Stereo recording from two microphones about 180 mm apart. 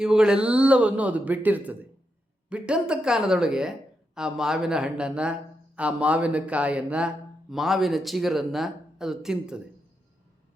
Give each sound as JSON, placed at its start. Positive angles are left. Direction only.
{"t": 0.0, "sound": "speech", "side_deg": -5}